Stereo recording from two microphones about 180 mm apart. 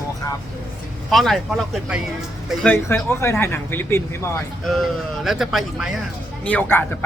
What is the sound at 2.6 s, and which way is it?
Speech, 10° left (ahead or behind).